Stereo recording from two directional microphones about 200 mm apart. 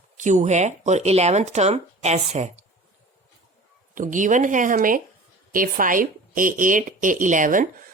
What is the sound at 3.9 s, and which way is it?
Speech, 40° right (ahead or behind).